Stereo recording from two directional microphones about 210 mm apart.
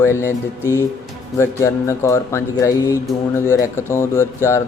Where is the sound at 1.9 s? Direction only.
15° left (ahead or behind).